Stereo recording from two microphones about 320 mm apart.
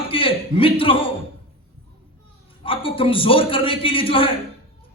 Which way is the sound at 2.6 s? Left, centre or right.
Centre.